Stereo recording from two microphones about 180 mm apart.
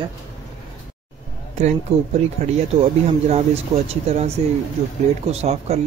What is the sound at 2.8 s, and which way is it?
Speech, 35° right (ahead or behind).